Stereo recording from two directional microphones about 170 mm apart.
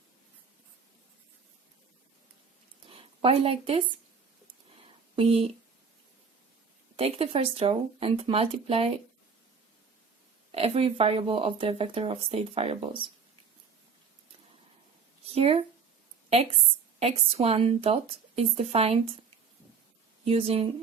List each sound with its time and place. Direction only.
2.9 s speech: 35° right (ahead or behind)
5.1 s speech: 35° right (ahead or behind)
6.9 s speech: 35° right (ahead or behind)
10.5 s speech: 35° right (ahead or behind)
15.4 s speech: 35° right (ahead or behind)
17.0 s speech: 35° right (ahead or behind)
20.2 s speech: 35° right (ahead or behind)